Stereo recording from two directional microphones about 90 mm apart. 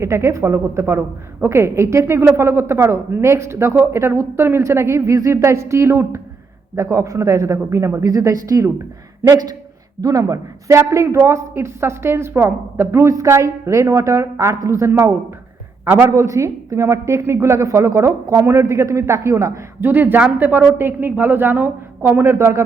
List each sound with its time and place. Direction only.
0.0 s a woman's voice: 30° right (ahead or behind)